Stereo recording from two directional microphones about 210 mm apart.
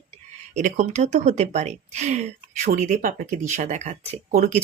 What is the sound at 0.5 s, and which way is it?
Speech, 35° right (ahead or behind).